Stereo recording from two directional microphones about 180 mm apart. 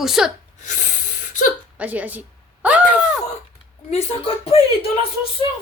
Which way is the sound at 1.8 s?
10° right (ahead or behind).